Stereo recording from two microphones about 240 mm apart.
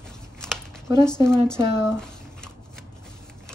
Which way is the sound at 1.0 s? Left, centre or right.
Centre.